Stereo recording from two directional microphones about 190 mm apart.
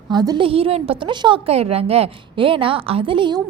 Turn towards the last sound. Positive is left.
turn(degrees=-25)  # may be behind; listen again after turning